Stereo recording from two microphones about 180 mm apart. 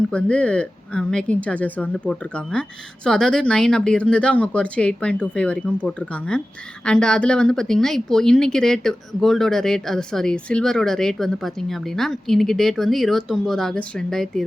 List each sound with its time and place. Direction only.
0.1 s speech: 5° left (ahead or behind)